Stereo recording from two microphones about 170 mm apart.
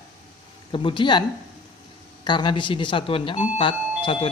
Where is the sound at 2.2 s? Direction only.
30° left (ahead or behind).